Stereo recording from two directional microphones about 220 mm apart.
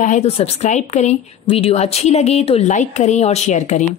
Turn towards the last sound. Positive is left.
turn(degrees=35)  # may be behind; listen again after turning